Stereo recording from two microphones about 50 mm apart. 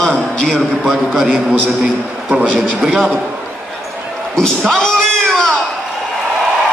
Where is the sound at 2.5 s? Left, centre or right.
Centre.